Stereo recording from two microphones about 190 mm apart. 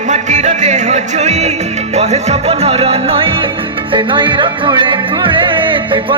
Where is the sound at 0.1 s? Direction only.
40° right (ahead or behind).